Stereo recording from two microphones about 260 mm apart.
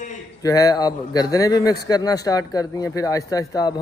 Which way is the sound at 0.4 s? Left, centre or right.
Centre.